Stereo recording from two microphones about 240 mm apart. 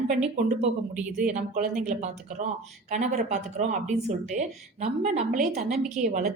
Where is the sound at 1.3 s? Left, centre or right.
Right.